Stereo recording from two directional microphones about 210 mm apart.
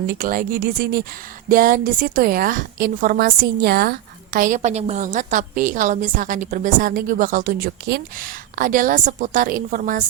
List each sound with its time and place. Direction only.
0.1 s a woman's voice: 40° right (ahead or behind)